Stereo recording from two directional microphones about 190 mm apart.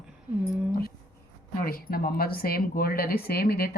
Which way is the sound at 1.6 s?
50° left (ahead or behind).